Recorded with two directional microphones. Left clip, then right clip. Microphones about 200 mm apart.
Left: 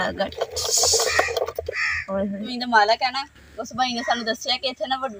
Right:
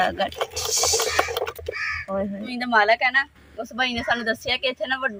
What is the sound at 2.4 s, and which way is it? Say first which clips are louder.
Speech: left 1 dB; centre (ahead or behind).